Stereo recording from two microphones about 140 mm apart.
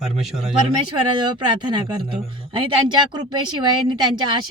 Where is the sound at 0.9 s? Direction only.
35° right (ahead or behind).